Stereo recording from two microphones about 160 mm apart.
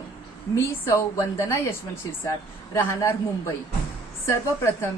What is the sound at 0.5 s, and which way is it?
A woman's voice, 15° left (ahead or behind).